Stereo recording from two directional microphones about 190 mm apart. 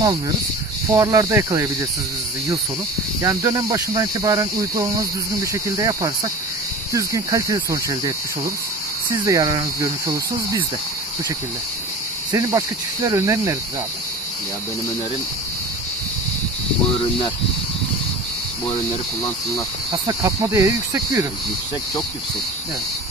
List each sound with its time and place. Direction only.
0.9 s speech: 20° right (ahead or behind)
3.2 s speech: 15° right (ahead or behind)
9.1 s speech: 20° right (ahead or behind)
12.3 s speech: 15° right (ahead or behind)
19.9 s speech: 20° right (ahead or behind)